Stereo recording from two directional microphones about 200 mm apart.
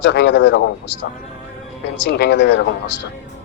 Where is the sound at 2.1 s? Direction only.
55° left (ahead or behind).